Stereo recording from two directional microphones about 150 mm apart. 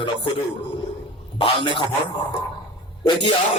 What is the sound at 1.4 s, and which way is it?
Speech, 35° left (ahead or behind).